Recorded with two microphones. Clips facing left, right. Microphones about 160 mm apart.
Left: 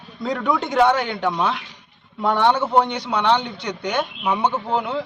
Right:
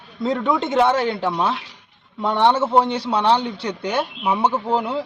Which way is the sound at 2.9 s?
30° right (ahead or behind).